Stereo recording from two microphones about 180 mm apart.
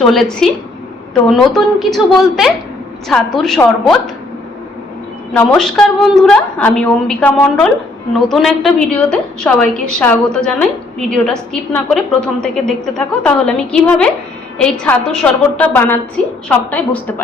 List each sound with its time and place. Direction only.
0.0 s a woman's voice: centre (ahead or behind)
5.3 s a woman's voice: 5° left (ahead or behind)